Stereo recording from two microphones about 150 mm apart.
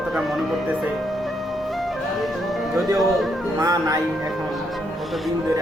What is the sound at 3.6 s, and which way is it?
Speech, 25° right (ahead or behind).